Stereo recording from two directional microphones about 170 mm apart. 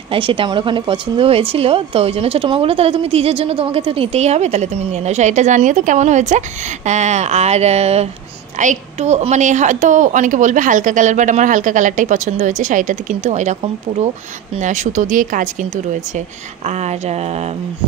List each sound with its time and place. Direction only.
0.1 s a woman's voice: 30° right (ahead or behind)
14.6 s a woman's voice: 45° right (ahead or behind)